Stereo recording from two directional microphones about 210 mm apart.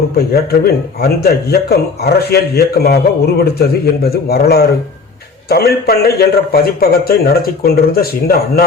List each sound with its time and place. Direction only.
0.6 s a man's voice: 50° left (ahead or behind)